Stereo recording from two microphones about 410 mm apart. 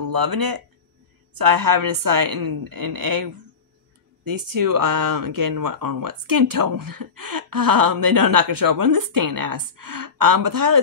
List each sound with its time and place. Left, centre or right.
0.0 s speech: right